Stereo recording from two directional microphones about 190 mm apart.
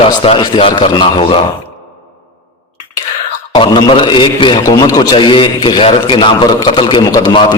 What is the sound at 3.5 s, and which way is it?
A man's voice, 25° left (ahead or behind).